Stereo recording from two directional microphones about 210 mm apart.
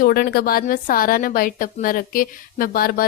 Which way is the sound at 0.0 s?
45° left (ahead or behind).